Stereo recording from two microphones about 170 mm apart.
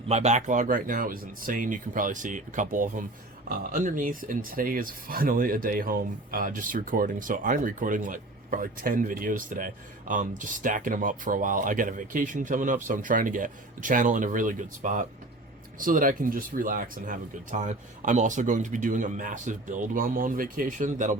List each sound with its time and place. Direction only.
0.1 s speech: 40° right (ahead or behind)